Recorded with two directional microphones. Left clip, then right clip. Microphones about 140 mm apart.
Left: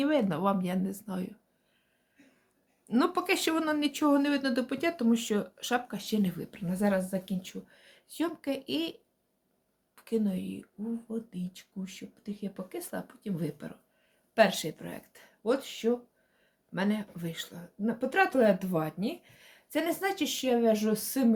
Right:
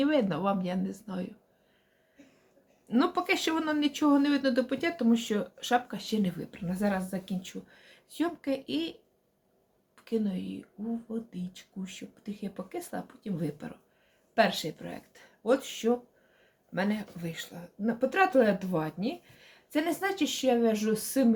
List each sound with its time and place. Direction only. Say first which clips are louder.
0.0 s speech: even; 20° left (ahead or behind)
2.9 s a woman's voice: even; 25° left (ahead or behind)
15.4 s speech: right 2 dB; 10° left (ahead or behind)
16.7 s speech: right 1 dB; 20° left (ahead or behind)